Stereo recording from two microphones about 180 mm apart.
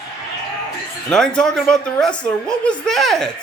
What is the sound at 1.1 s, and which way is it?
Speech, 5° left (ahead or behind).